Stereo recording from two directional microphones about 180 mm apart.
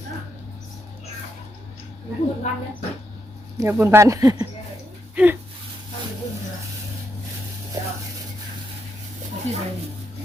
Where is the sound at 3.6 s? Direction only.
15° right (ahead or behind).